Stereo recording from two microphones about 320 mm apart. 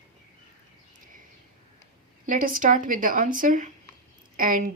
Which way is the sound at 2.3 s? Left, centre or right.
Right.